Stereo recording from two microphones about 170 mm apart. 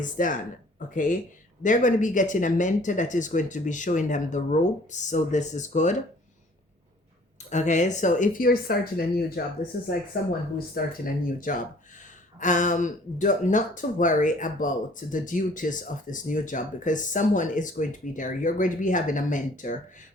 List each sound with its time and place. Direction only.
0.0 s speech: 50° left (ahead or behind)
7.5 s speech: 45° left (ahead or behind)